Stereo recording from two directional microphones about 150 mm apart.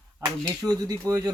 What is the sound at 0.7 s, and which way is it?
Speech, 25° right (ahead or behind).